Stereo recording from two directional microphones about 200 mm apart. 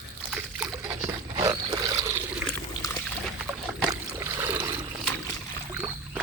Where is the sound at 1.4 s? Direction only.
15° right (ahead or behind).